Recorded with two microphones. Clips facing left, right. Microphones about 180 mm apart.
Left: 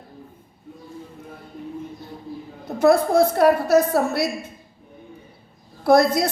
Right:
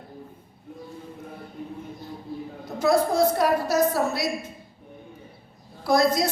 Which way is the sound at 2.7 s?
60° left (ahead or behind).